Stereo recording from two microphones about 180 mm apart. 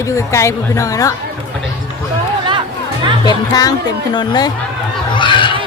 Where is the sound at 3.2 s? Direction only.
20° left (ahead or behind).